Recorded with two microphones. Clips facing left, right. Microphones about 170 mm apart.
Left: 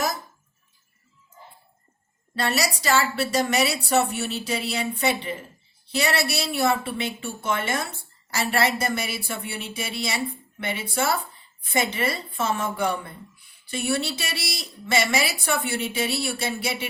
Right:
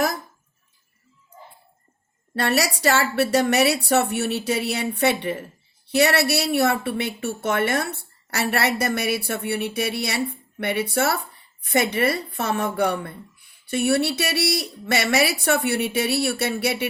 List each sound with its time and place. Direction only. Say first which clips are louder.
2.3 s a woman's voice: right 3 dB; 65° right (ahead or behind)
5.9 s a woman's voice: right 6 dB; 60° right (ahead or behind)